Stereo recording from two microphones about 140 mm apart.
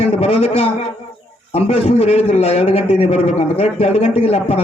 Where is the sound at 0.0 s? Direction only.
45° left (ahead or behind).